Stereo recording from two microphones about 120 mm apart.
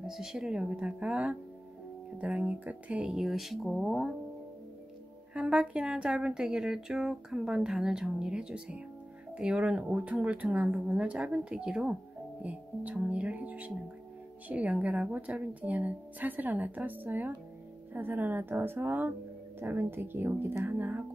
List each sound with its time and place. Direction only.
0.0 s speech: 5° right (ahead or behind)
5.3 s speech: 10° right (ahead or behind)